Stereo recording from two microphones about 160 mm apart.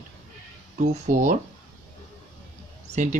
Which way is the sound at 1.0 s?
50° right (ahead or behind).